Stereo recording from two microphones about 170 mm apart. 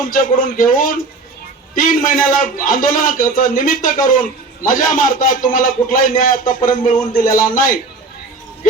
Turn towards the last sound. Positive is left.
turn(degrees=55)  # may be behind; listen again after turning